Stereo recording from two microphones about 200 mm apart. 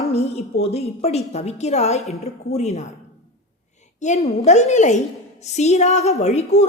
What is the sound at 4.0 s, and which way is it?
A woman's voice, 35° left (ahead or behind).